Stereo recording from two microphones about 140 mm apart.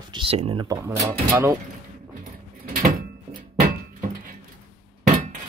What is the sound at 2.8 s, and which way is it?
Door, 75° right (ahead or behind).